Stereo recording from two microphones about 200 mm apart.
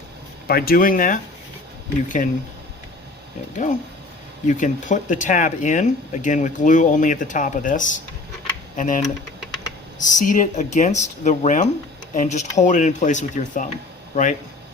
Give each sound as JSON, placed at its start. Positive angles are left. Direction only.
{"t": 0.4, "sound": "speech", "side_deg": 50}
{"t": 4.4, "sound": "speech", "side_deg": 40}